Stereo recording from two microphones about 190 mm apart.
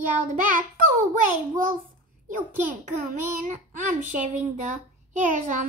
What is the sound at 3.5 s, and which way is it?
A child's voice, 40° right (ahead or behind).